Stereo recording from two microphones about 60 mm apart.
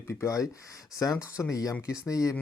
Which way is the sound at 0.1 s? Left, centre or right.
Left.